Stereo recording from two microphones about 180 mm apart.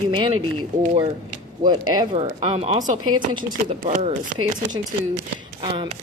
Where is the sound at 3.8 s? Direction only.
45° right (ahead or behind).